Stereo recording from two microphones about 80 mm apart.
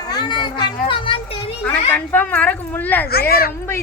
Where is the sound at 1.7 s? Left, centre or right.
Left.